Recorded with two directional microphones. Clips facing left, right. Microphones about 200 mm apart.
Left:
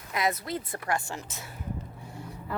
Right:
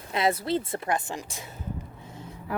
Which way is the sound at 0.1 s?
30° right (ahead or behind).